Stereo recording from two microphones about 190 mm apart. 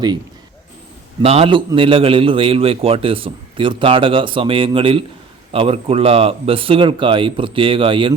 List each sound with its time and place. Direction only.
1.2 s a man's voice: 30° right (ahead or behind)